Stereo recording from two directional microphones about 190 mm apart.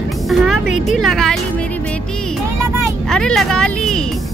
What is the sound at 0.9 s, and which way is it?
Speech, centre (ahead or behind).